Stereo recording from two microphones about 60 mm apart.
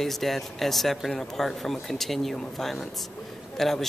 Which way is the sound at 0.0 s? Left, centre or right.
Centre.